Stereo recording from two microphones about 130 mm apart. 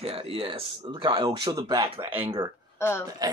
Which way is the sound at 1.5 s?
25° right (ahead or behind).